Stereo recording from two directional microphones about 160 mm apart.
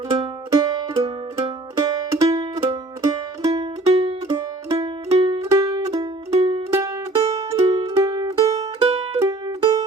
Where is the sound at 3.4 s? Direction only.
20° right (ahead or behind).